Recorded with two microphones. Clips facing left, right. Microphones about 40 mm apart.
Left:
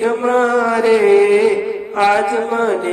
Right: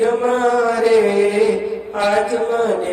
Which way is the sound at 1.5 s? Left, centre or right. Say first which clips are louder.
Left 1 dB; left.